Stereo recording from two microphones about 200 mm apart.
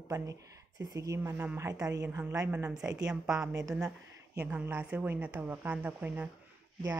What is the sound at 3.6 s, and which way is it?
Speech, 15° right (ahead or behind).